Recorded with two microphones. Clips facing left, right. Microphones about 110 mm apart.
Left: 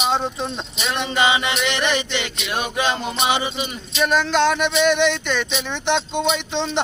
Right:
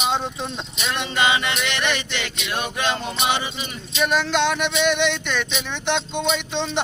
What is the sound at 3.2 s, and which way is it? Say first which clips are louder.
Music: left 3 dB; 15° left (ahead or behind).